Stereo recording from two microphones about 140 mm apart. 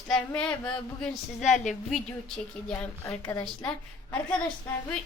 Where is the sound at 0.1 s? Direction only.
5° left (ahead or behind).